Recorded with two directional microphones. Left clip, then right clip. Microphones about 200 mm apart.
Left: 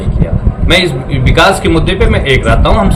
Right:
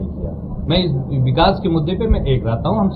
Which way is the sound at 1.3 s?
15° left (ahead or behind).